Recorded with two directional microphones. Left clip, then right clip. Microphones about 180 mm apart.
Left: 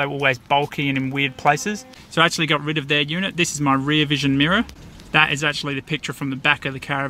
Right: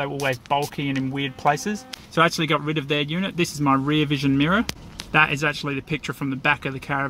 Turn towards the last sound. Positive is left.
turn(degrees=5)  # may be behind; listen again after turning